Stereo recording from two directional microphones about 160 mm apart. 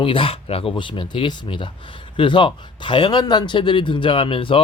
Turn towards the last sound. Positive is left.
turn(degrees=35)  # may be behind; listen again after turning